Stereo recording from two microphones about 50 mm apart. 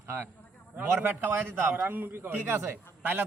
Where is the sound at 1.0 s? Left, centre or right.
Right.